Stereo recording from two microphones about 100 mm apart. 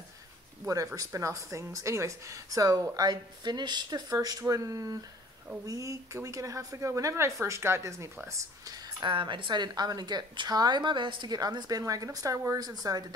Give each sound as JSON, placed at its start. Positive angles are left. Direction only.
{"t": 0.9, "sound": "speech", "side_deg": -35}
{"t": 8.3, "sound": "speech", "side_deg": -40}
{"t": 9.1, "sound": "a woman's voice", "side_deg": -55}